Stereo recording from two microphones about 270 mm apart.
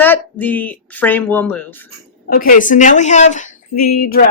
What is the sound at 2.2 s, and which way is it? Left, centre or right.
Speech, left.